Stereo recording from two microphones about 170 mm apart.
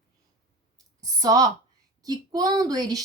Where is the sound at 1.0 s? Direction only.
20° right (ahead or behind).